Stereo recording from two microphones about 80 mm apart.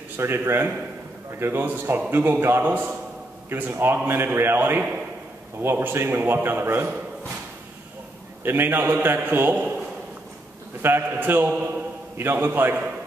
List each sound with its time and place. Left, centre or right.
0.2 s a man's voice: right
2.6 s a man's voice: right
8.5 s a man's voice: right
10.8 s a man's voice: right